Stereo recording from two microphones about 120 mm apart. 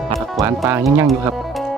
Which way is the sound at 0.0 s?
Centre (ahead or behind).